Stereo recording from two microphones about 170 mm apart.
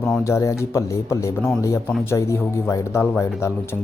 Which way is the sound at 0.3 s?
15° left (ahead or behind).